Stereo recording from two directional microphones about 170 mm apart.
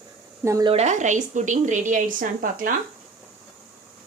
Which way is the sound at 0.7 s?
40° right (ahead or behind).